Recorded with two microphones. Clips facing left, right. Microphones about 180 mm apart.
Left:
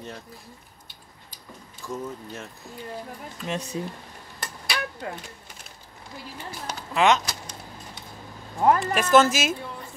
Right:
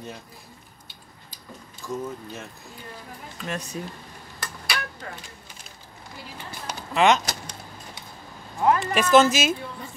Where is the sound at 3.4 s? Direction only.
20° left (ahead or behind).